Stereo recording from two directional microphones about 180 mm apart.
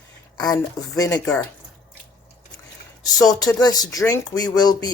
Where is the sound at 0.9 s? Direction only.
20° left (ahead or behind).